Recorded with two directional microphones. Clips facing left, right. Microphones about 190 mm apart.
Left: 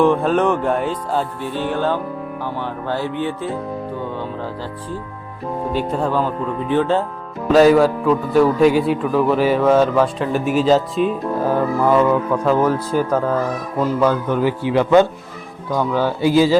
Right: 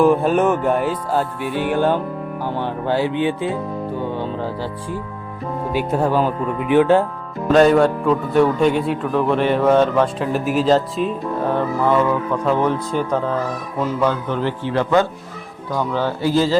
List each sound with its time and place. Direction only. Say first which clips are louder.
0.0 s music: right 1 dB; 5° right (ahead or behind)
2.4 s speech: right 4 dB; 20° right (ahead or behind)
5.7 s music: right 2 dB; 10° right (ahead or behind)
7.4 s a man's voice: left 1 dB; 5° left (ahead or behind)